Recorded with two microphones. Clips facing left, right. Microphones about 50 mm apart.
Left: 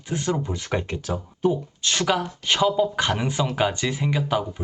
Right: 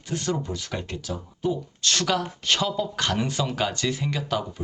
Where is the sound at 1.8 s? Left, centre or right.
Centre.